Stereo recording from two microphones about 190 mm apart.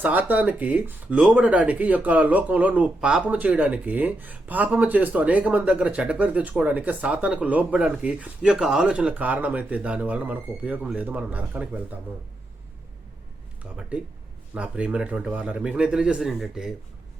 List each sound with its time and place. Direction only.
0.0 s speech: 10° right (ahead or behind)
13.7 s a man's voice: 5° right (ahead or behind)